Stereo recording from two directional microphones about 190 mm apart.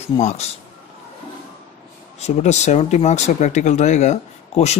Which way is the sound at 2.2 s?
35° left (ahead or behind).